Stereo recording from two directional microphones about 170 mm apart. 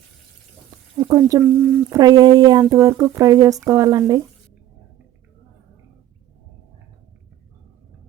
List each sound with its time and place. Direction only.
0.9 s speech: 20° right (ahead or behind)
1.5 s speech: 5° right (ahead or behind)
1.9 s speech: 20° right (ahead or behind)